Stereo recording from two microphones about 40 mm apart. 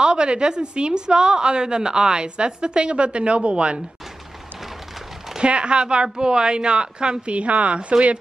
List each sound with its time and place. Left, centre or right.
0.0 s a woman's voice: right
5.4 s a woman's voice: right